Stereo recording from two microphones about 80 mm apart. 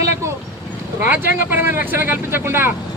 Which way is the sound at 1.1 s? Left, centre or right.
Right.